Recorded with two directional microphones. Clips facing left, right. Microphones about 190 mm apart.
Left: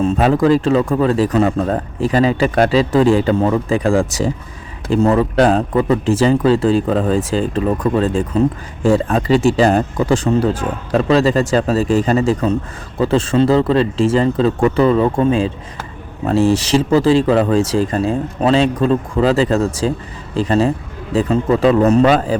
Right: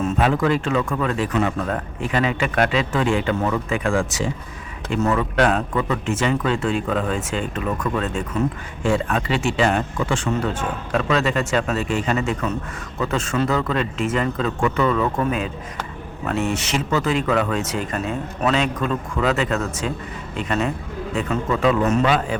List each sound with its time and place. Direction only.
0.0 s speech: 35° left (ahead or behind)